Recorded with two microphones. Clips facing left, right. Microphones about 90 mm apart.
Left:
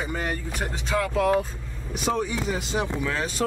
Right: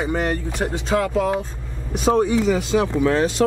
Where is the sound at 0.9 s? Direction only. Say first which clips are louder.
Right 5 dB; 30° right (ahead or behind).